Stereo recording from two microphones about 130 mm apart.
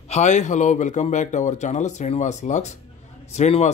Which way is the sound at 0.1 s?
65° left (ahead or behind).